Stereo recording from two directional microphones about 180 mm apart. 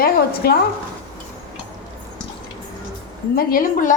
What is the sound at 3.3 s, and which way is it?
Speech, 50° left (ahead or behind).